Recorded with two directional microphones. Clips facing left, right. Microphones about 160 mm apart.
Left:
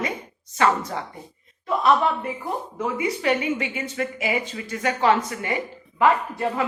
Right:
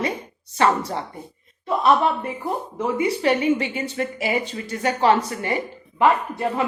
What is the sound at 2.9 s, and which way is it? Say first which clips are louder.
Speech: right 3 dB; 35° right (ahead or behind).